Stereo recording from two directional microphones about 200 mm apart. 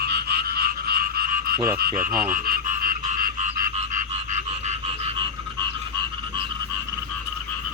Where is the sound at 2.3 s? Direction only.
45° right (ahead or behind).